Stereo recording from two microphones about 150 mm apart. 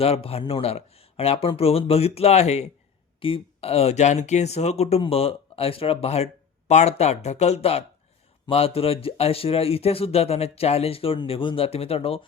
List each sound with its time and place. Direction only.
0.0 s speech: 40° left (ahead or behind)